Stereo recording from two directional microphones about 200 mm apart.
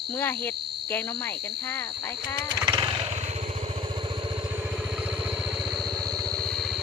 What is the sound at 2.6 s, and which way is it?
Vehicle, 20° right (ahead or behind).